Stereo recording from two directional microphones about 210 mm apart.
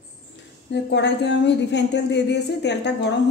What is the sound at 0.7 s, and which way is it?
A woman's voice, 55° left (ahead or behind).